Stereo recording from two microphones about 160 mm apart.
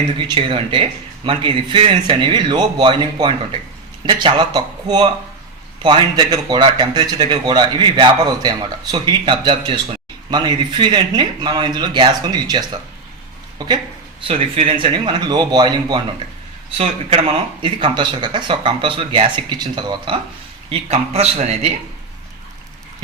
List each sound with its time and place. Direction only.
0.2 s speech: 30° right (ahead or behind)
14.2 s speech: 35° right (ahead or behind)
16.7 s speech: 40° right (ahead or behind)
20.7 s speech: 40° right (ahead or behind)